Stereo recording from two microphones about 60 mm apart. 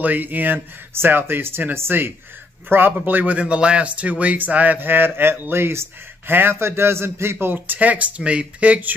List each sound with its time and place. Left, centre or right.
0.0 s speech: right